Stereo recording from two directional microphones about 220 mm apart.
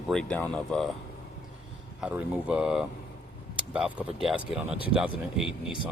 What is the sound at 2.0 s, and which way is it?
Speech, 5° right (ahead or behind).